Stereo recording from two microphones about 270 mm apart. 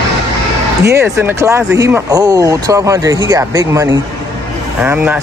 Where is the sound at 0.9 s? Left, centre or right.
Centre.